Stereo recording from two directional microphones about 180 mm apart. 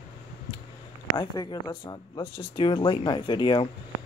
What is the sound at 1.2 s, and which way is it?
Speech, 25° left (ahead or behind).